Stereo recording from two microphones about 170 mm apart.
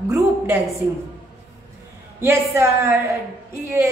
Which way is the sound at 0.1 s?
20° right (ahead or behind).